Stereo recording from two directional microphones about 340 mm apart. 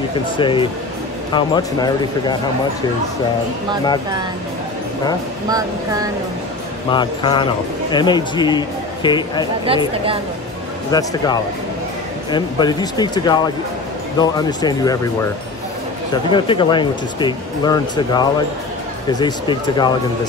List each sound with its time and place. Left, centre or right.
0.4 s speech: centre
6.9 s speech: centre
9.7 s speech: centre
10.9 s speech: centre
16.1 s speech: centre